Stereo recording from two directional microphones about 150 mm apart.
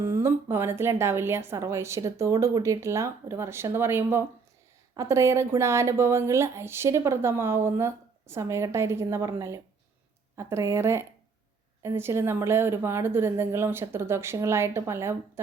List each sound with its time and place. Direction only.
0.0 s speech: 15° right (ahead or behind)